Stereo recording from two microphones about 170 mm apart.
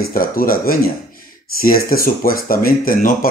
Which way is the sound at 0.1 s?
55° left (ahead or behind).